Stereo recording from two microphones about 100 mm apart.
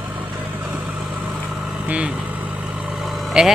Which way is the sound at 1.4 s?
Centre (ahead or behind).